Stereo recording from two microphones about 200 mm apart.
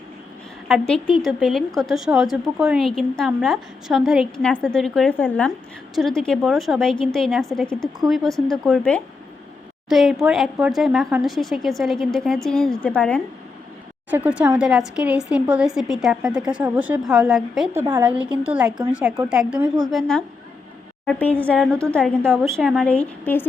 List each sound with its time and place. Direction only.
0.7 s a woman's voice: centre (ahead or behind)
14.1 s a woman's voice: 5° right (ahead or behind); by 23.5 s 10° left (ahead or behind)